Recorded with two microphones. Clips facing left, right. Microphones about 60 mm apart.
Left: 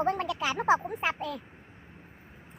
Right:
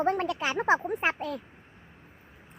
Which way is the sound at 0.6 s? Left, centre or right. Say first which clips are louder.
Right 1 dB; right.